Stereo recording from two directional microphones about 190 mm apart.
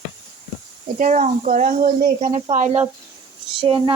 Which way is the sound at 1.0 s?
40° right (ahead or behind).